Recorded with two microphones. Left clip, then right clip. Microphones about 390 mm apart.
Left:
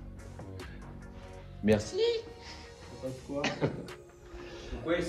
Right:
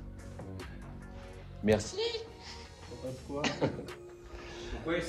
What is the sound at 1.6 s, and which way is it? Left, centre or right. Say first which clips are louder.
Speech: left 2 dB; centre.